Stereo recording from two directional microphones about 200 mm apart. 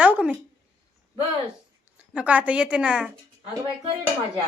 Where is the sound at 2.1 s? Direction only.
5° right (ahead or behind).